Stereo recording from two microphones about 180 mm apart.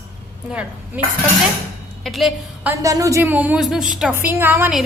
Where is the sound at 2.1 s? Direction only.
Centre (ahead or behind).